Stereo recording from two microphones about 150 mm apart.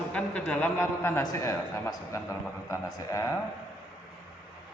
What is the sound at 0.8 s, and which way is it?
A man's voice, 20° left (ahead or behind).